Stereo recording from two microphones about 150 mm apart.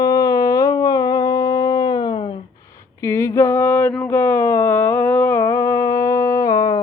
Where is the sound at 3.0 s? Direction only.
15° left (ahead or behind).